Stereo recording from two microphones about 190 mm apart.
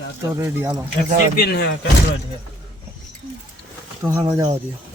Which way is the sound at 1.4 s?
60° left (ahead or behind).